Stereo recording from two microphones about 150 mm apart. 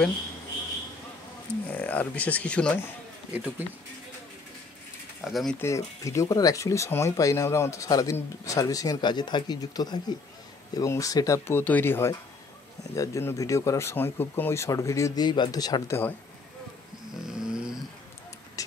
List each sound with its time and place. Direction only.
1.7 s speech: 10° left (ahead or behind)
3.3 s speech: 10° right (ahead or behind)
5.2 s speech: centre (ahead or behind)
5.6 s speech: 20° left (ahead or behind)
17.3 s snoring: 5° right (ahead or behind)